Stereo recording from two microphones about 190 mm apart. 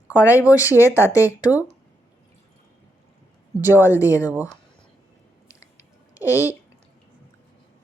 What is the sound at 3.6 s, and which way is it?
Speech, 10° right (ahead or behind).